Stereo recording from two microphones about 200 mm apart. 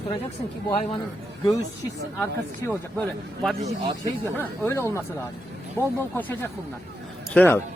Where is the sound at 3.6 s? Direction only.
20° right (ahead or behind).